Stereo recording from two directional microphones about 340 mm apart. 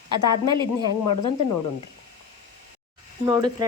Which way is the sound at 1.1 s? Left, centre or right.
Left.